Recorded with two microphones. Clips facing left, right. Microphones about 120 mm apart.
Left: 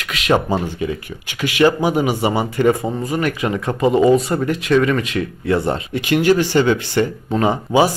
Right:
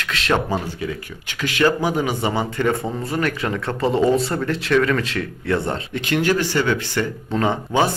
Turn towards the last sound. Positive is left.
turn(degrees=10)  # may be behind; listen again after turning